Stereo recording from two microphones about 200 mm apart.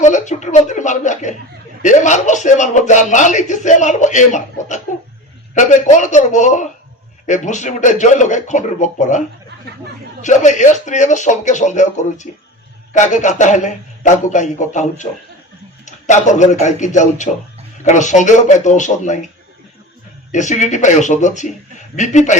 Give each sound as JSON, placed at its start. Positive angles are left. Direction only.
{"t": 0.0, "sound": "speech", "side_deg": 35}
{"t": 10.2, "sound": "speech", "side_deg": 35}
{"t": 20.3, "sound": "speech", "side_deg": 35}